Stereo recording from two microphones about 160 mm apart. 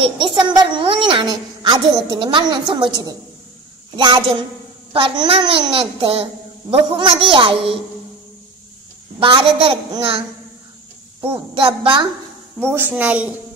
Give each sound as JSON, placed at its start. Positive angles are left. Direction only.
{"t": 0.0, "sound": "a woman's voice", "side_deg": -30}
{"t": 9.2, "sound": "a child's voice", "side_deg": -30}
{"t": 11.5, "sound": "a child's voice", "side_deg": -30}
{"t": 12.7, "sound": "a woman's voice", "side_deg": -10}